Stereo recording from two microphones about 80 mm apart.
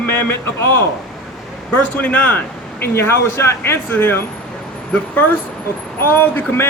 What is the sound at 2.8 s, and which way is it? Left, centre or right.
Speech, left.